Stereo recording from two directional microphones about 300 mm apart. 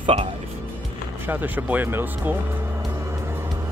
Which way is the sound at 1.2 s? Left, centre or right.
Centre.